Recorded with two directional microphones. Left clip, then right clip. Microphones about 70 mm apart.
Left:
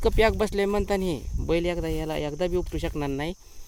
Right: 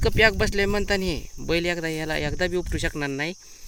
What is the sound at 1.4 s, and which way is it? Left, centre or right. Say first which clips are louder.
Speech: right 1 dB; centre.